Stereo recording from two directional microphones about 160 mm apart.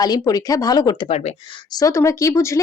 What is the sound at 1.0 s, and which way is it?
Speech, 40° left (ahead or behind).